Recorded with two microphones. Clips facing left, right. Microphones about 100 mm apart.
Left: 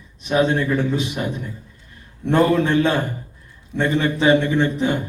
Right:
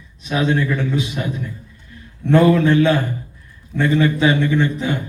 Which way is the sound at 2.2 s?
30° left (ahead or behind).